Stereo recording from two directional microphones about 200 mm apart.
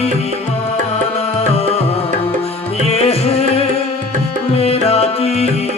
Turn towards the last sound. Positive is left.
turn(degrees=30)  # may be behind; listen again after turning